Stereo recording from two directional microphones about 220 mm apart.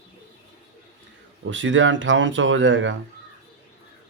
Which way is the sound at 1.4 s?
60° right (ahead or behind).